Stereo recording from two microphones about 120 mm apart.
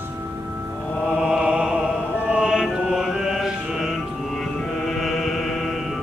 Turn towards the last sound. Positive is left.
turn(degrees=0)  # may be behind; listen again after turning